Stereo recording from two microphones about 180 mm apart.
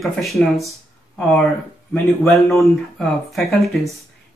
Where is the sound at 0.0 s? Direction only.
Centre (ahead or behind).